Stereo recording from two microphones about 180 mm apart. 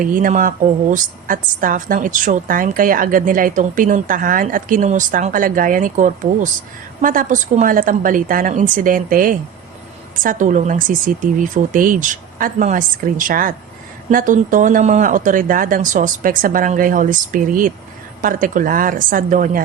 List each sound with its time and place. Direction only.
0.0 s a woman's voice: 50° right (ahead or behind)